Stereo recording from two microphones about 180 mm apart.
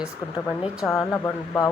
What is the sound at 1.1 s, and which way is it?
Speech, 20° left (ahead or behind).